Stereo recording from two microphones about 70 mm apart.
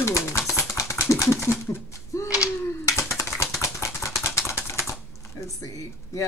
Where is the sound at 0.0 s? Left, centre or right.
Left.